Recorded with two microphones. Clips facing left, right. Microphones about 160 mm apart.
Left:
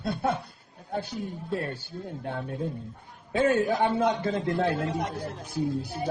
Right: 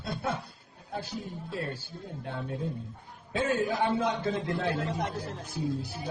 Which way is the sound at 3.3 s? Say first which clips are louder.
Left 5 dB; 55° left (ahead or behind).